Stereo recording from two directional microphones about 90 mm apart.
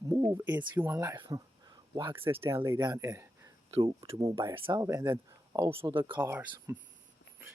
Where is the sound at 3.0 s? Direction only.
35° right (ahead or behind).